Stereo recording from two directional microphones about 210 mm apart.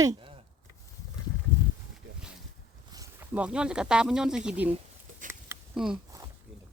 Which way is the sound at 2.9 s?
15° right (ahead or behind).